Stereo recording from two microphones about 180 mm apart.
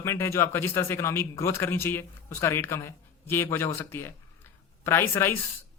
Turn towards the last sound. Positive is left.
turn(degrees=15)  # may be behind; listen again after turning